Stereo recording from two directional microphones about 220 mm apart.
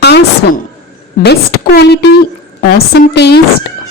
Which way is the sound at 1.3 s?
45° left (ahead or behind).